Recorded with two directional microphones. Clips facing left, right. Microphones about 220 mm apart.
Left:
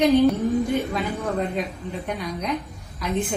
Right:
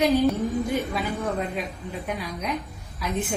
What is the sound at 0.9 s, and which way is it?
A woman's voice, centre (ahead or behind).